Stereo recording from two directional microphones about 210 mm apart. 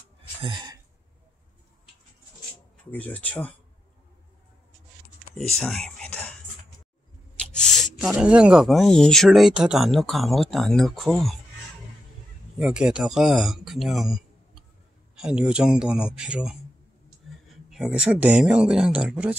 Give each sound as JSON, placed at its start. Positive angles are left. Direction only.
{"t": 0.4, "sound": "speech", "side_deg": -20}
{"t": 2.8, "sound": "speech", "side_deg": 5}
{"t": 5.3, "sound": "whispering", "side_deg": 5}
{"t": 7.3, "sound": "speech", "side_deg": 5}
{"t": 12.5, "sound": "a man's voice", "side_deg": -5}
{"t": 17.6, "sound": "speech", "side_deg": 0}